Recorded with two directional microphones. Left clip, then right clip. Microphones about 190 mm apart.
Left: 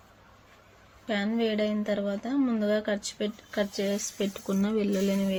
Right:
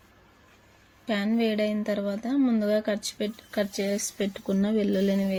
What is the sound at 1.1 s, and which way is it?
Speech, 30° right (ahead or behind).